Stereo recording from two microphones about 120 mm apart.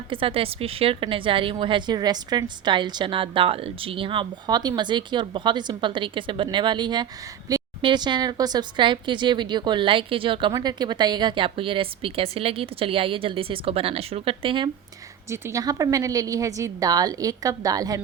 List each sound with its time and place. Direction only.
0.1 s a woman's voice: 50° right (ahead or behind)
15.3 s a woman's voice: 25° right (ahead or behind)